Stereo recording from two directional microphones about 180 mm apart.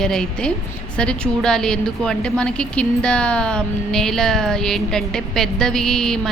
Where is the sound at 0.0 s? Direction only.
5° left (ahead or behind).